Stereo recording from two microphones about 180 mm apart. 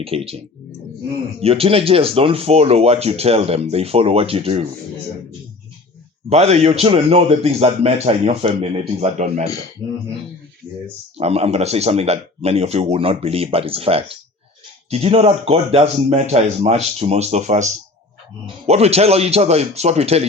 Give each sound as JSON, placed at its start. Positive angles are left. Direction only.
{"t": 0.0, "sound": "speech", "side_deg": -35}
{"t": 1.4, "sound": "speech", "side_deg": -35}
{"t": 6.3, "sound": "speech", "side_deg": -35}
{"t": 11.2, "sound": "speech", "side_deg": -35}